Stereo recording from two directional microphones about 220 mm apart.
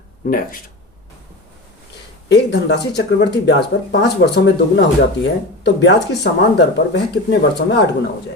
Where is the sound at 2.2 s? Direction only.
50° left (ahead or behind).